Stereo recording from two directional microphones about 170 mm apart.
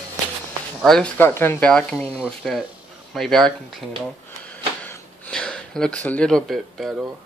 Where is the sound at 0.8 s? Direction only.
5° left (ahead or behind).